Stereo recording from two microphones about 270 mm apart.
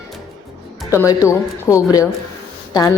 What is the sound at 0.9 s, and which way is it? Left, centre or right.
Speech, centre.